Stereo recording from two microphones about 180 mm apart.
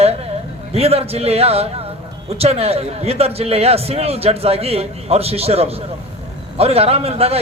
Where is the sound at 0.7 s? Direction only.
35° right (ahead or behind).